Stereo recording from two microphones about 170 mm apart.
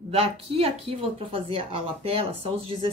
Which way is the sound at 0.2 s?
35° right (ahead or behind).